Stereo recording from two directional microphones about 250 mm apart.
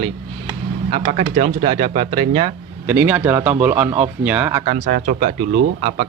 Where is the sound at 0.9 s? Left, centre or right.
Right.